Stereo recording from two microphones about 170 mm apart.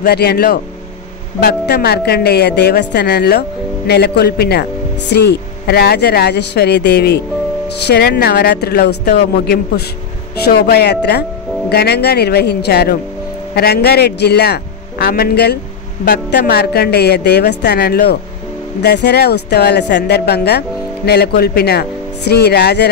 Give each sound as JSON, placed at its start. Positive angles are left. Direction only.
{"t": 0.0, "sound": "a woman's voice", "side_deg": 70}
{"t": 18.8, "sound": "a woman's voice", "side_deg": 85}